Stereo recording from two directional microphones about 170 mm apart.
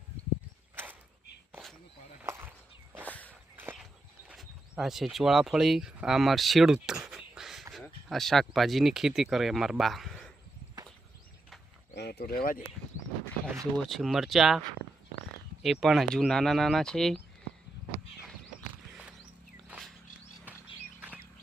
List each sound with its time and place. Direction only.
2.2 s a sound: 15° right (ahead or behind)
3.1 s walk: 10° left (ahead or behind)
4.3 s speech: 5° right (ahead or behind)
6.8 s a sound: 5° right (ahead or behind)
7.7 s speech: centre (ahead or behind)
11.9 s speech: 75° left (ahead or behind); by 12.6 s 60° left (ahead or behind)
13.7 s speech: centre (ahead or behind)
15.6 s speech: centre (ahead or behind)
19.6 s a sound: 10° right (ahead or behind)
21.0 s bird: 10° right (ahead or behind)